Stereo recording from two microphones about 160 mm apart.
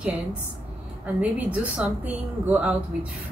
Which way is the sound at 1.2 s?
5° right (ahead or behind).